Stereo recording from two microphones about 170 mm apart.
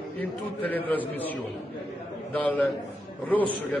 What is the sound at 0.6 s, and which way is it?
Speech, 10° left (ahead or behind).